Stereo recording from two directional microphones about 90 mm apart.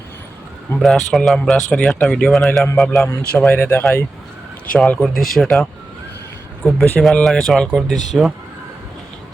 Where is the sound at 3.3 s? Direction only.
15° left (ahead or behind).